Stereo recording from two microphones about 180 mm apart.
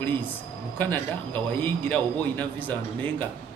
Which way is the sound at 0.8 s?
10° left (ahead or behind).